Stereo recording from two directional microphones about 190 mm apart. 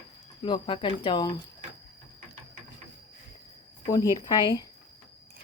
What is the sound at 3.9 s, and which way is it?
Speech, 20° left (ahead or behind).